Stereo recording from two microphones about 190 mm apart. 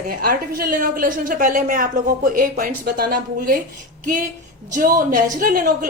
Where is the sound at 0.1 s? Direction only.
50° right (ahead or behind).